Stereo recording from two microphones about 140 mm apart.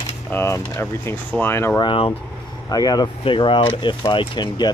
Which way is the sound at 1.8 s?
35° left (ahead or behind).